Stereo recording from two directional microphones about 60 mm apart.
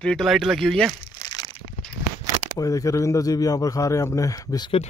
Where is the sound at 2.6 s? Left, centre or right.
Left.